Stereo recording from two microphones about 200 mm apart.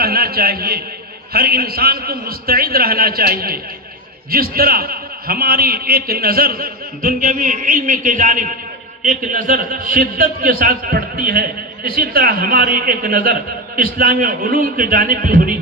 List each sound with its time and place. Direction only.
0.0 s a man's voice: 50° right (ahead or behind)